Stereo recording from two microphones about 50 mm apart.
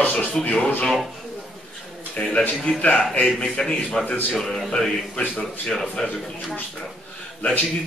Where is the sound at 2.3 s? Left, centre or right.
Left.